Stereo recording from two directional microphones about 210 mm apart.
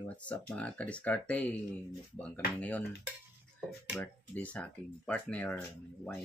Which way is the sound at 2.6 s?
5° left (ahead or behind).